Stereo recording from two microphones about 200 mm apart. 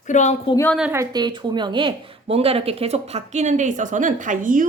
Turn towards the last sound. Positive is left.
turn(degrees=-40)  # may be behind; listen again after turning